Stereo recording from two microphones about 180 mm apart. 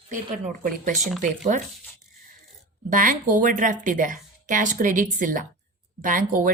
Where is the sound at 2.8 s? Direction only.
50° right (ahead or behind).